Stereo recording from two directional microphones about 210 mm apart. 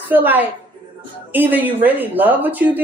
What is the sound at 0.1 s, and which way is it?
Speech, 10° right (ahead or behind).